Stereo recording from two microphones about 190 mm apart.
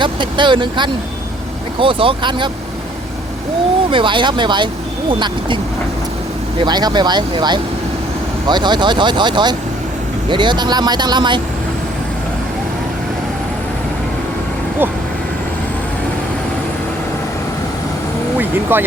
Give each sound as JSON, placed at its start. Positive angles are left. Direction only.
{"t": 0.0, "sound": "speech", "side_deg": -25}
{"t": 3.9, "sound": "speech", "side_deg": -25}
{"t": 6.6, "sound": "speech", "side_deg": -20}
{"t": 18.3, "sound": "speech", "side_deg": -10}